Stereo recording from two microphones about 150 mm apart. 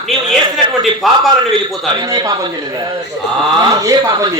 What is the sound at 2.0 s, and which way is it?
Speech, 25° right (ahead or behind).